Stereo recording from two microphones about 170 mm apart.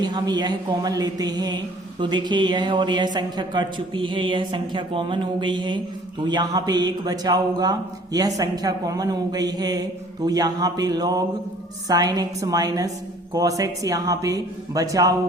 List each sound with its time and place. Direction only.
0.0 s speech: 25° right (ahead or behind)